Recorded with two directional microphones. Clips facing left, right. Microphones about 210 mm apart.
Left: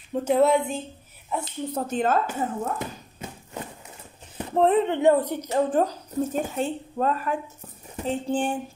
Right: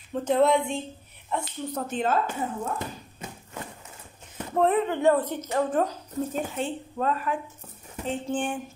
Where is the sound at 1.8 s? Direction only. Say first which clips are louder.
Left 3 dB; 45° left (ahead or behind).